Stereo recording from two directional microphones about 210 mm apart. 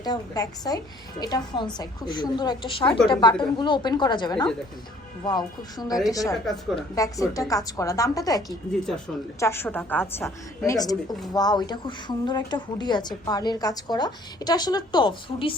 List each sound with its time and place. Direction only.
0.0 s a woman's voice: 20° left (ahead or behind)
6.3 s a woman's voice: centre (ahead or behind)
6.9 s a woman's voice: 15° left (ahead or behind)